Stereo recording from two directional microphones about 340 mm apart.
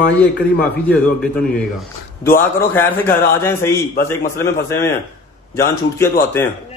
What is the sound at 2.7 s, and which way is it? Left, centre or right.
Speech, centre.